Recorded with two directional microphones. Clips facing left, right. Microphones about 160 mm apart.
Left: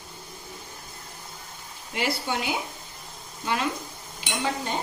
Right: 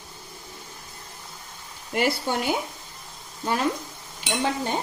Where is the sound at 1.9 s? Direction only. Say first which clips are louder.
Right 4 dB; 50° right (ahead or behind).